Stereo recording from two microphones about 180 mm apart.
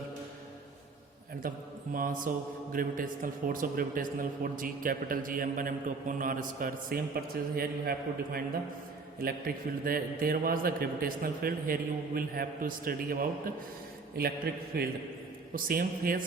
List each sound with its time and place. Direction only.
1.4 s a man's voice: 50° right (ahead or behind)